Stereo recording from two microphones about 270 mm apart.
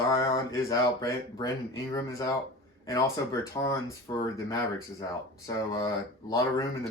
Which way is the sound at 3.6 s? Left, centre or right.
Centre.